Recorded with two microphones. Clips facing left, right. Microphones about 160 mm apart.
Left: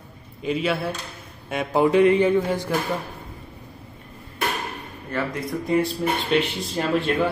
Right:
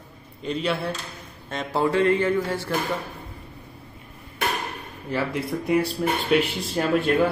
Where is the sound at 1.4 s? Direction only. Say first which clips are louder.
Left 4 dB; 10° left (ahead or behind).